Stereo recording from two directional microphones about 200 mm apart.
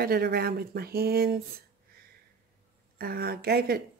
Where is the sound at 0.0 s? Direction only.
50° right (ahead or behind).